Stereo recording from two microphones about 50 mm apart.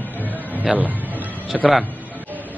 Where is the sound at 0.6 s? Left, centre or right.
Right.